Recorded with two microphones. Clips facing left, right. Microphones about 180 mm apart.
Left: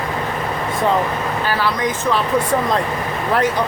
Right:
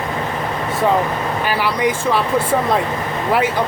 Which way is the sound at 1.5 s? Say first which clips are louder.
Right 2 dB; 15° right (ahead or behind).